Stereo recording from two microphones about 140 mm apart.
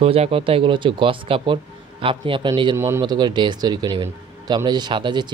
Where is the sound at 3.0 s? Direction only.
30° right (ahead or behind).